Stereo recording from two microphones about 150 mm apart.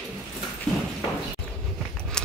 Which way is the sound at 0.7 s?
5° left (ahead or behind).